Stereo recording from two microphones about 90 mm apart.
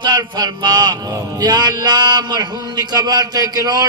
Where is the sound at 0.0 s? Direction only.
55° right (ahead or behind).